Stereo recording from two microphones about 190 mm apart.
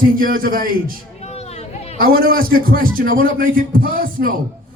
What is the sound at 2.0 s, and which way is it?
Speech, 50° right (ahead or behind).